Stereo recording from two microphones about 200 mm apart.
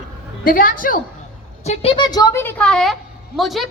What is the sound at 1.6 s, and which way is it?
A woman's voice, 30° left (ahead or behind).